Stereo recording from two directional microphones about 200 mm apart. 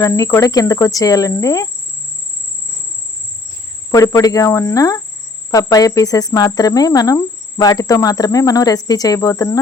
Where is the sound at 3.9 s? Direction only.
15° left (ahead or behind).